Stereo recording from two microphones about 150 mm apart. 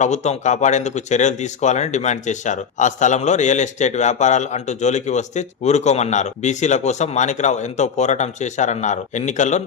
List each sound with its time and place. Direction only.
0.0 s speech: 50° left (ahead or behind)